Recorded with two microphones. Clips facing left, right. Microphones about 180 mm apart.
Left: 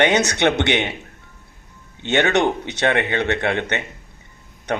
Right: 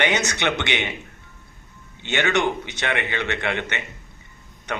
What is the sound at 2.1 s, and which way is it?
A man's voice, 60° left (ahead or behind).